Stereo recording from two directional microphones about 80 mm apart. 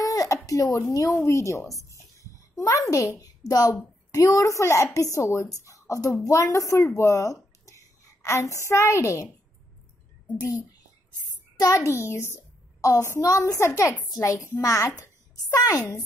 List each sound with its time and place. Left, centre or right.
0.0 s a sound: left
0.5 s speech: left
3.2 s a woman's voice: left
11.7 s a woman's voice: left